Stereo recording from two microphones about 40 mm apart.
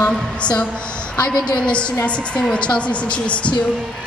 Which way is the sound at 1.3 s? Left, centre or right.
Centre.